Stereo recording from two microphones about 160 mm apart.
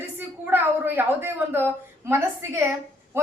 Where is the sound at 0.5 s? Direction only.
15° right (ahead or behind).